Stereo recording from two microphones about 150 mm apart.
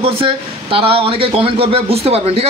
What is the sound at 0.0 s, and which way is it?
A man's voice, 35° right (ahead or behind).